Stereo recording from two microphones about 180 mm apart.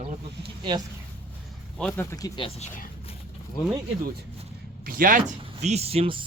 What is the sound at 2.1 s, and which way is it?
Speech, 25° left (ahead or behind).